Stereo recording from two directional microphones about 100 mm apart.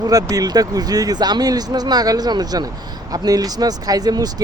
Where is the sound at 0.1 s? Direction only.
35° right (ahead or behind).